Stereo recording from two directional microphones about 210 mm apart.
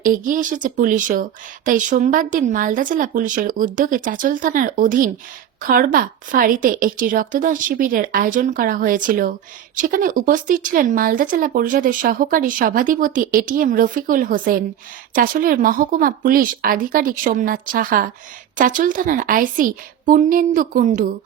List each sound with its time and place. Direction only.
0.1 s speech: 40° right (ahead or behind)